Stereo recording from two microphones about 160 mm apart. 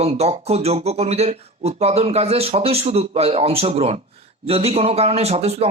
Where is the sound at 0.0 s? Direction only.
40° right (ahead or behind).